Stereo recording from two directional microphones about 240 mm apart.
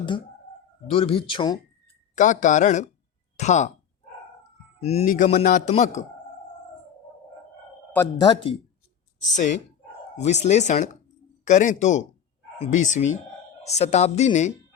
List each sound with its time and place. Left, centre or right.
0.9 s speech: left
2.1 s a man's voice: left
4.8 s a man's voice: left
8.2 s speech: centre
9.3 s a man's voice: left